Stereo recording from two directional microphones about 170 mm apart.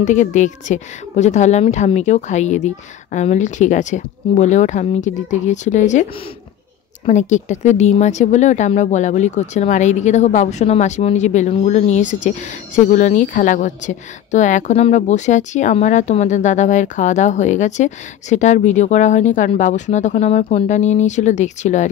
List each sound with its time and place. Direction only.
0.0 s speech: 45° left (ahead or behind)
7.1 s speech: 45° left (ahead or behind)